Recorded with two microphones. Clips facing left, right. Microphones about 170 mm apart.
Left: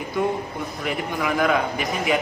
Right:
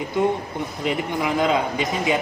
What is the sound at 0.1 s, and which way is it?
A man's voice, 20° right (ahead or behind).